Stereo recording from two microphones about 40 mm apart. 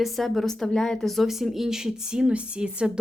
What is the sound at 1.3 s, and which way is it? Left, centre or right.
Speech, centre.